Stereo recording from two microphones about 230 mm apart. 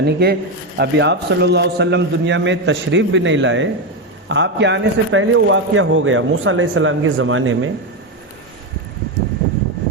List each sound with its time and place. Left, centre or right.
0.0 s a man's voice: right